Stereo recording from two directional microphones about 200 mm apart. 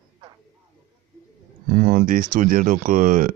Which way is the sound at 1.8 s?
45° right (ahead or behind).